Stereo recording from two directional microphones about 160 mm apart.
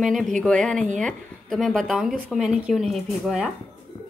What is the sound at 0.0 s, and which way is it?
A woman's voice, centre (ahead or behind).